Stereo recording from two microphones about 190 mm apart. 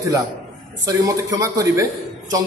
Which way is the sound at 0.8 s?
15° right (ahead or behind).